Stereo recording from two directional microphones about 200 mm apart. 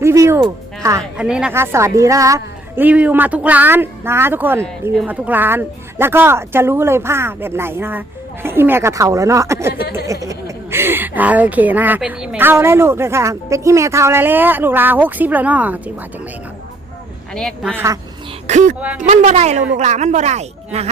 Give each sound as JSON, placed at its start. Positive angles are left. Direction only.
{"t": 0.0, "sound": "a woman's voice", "side_deg": -15}
{"t": 17.3, "sound": "a woman's voice", "side_deg": 0}
{"t": 17.7, "sound": "a woman's voice", "side_deg": -15}
{"t": 18.4, "sound": "speech", "side_deg": -35}